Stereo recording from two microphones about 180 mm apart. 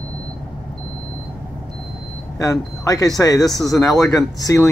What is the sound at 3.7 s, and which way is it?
Speech, 20° left (ahead or behind).